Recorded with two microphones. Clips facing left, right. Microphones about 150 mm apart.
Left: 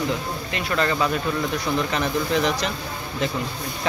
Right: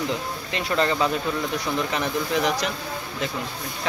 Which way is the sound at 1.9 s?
15° right (ahead or behind).